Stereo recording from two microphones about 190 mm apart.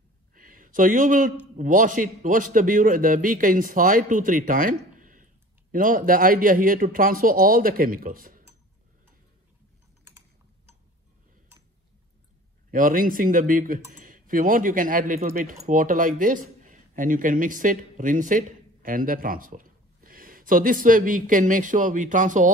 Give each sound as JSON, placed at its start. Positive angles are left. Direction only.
{"t": 0.3, "sound": "a sound", "side_deg": -45}
{"t": 1.6, "sound": "speech", "side_deg": -45}
{"t": 12.7, "sound": "speech", "side_deg": -45}